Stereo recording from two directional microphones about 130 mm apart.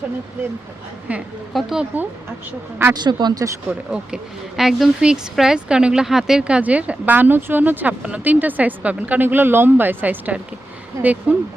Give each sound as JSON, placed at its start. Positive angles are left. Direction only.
{"t": 1.5, "sound": "speech", "side_deg": -5}
{"t": 2.9, "sound": "speech", "side_deg": -35}
{"t": 3.7, "sound": "speech", "side_deg": -5}